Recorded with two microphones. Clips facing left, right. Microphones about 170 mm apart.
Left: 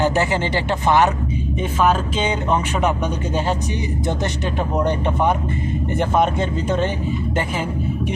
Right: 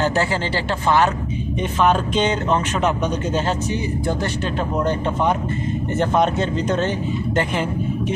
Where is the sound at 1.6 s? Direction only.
5° left (ahead or behind).